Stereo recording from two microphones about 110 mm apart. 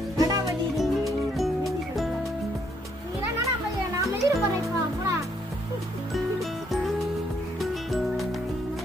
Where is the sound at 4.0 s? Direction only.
30° right (ahead or behind).